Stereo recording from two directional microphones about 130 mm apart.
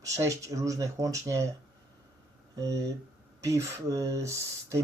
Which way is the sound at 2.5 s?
25° right (ahead or behind).